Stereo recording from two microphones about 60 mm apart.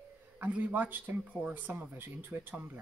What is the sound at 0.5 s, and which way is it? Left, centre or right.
Speech, right.